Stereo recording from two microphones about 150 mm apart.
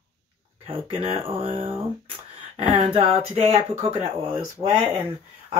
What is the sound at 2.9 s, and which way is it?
Speech, 40° right (ahead or behind).